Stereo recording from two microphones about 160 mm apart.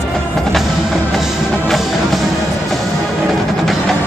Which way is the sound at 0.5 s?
Centre (ahead or behind).